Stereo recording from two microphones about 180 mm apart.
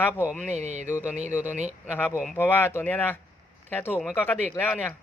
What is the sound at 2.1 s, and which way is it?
Speech, 5° right (ahead or behind).